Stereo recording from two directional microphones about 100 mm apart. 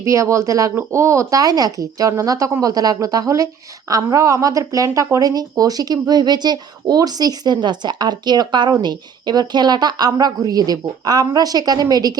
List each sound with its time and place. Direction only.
0.0 s speech: 30° right (ahead or behind)